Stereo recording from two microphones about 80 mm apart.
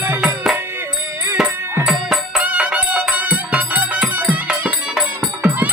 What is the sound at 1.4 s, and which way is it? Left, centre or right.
Music, centre.